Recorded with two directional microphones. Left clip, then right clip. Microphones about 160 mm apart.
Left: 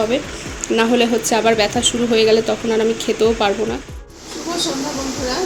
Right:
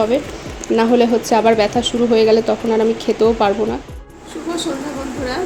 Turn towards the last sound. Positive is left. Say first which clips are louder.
# right 2 dB
turn(degrees=-20)  # may be behind; listen again after turning